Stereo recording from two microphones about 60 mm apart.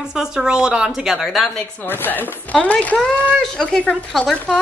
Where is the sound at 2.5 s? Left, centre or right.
Left.